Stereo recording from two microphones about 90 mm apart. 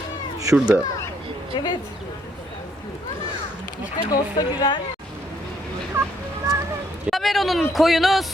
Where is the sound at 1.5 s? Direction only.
55° left (ahead or behind).